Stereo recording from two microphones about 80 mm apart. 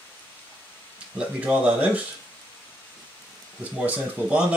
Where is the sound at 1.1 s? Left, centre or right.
Centre.